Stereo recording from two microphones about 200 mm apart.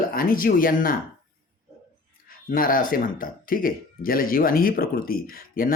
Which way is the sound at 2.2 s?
45° left (ahead or behind).